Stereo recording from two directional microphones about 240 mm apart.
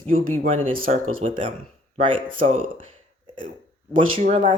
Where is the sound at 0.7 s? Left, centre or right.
Right.